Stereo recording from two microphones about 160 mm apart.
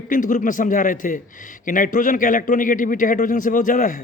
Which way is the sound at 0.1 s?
55° left (ahead or behind).